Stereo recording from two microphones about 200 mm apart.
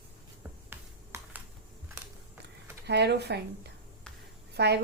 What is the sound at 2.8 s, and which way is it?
A woman's voice, 55° right (ahead or behind).